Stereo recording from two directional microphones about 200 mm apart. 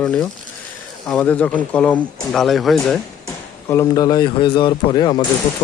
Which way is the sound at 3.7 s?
15° left (ahead or behind).